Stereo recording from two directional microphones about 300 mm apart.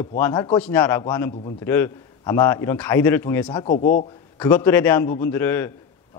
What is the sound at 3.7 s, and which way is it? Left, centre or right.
Speech, left.